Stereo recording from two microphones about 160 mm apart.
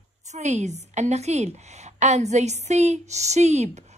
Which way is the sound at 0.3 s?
45° right (ahead or behind).